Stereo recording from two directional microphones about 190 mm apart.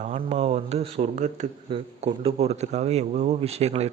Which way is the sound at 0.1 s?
35° right (ahead or behind).